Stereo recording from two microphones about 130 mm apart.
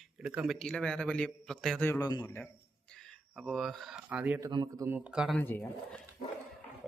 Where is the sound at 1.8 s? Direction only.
15° left (ahead or behind).